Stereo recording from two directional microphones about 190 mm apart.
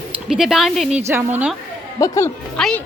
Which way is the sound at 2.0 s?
15° left (ahead or behind).